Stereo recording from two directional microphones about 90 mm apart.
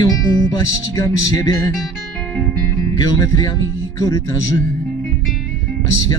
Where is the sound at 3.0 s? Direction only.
45° left (ahead or behind).